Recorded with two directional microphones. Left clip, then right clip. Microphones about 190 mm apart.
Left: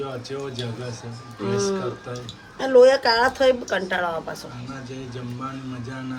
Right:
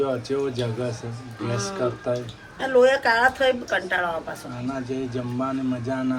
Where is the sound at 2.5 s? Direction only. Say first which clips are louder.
Left 4 dB; 55° left (ahead or behind).